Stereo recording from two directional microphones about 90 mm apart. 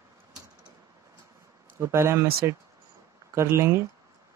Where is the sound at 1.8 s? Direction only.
30° right (ahead or behind).